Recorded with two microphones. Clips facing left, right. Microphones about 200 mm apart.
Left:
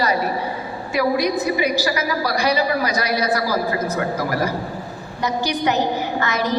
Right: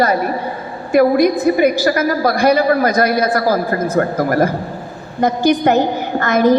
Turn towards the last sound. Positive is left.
turn(degrees=-50)  # may be behind; listen again after turning